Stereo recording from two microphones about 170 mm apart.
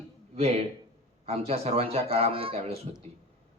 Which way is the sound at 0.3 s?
40° right (ahead or behind).